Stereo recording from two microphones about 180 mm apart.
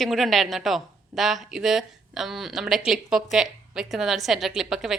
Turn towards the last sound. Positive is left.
turn(degrees=0)  # may be behind; listen again after turning